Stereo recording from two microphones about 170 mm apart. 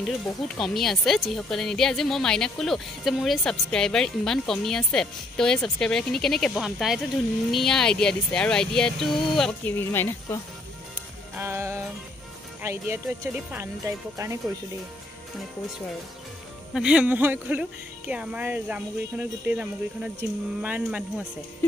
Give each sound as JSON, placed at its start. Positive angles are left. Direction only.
{"t": 0.6, "sound": "speech", "side_deg": 0}
{"t": 11.3, "sound": "music", "side_deg": -15}
{"t": 12.6, "sound": "speech", "side_deg": -15}
{"t": 16.7, "sound": "speech", "side_deg": -5}